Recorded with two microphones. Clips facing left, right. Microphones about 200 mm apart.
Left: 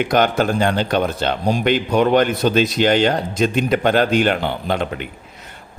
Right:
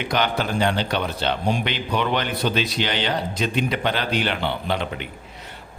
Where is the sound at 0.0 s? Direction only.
45° left (ahead or behind).